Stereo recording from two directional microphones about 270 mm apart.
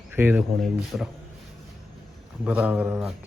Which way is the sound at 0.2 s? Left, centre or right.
Centre.